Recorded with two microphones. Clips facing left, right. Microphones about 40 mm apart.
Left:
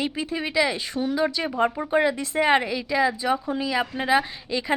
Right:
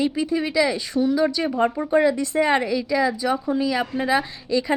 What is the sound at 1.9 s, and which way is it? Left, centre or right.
Speech, centre.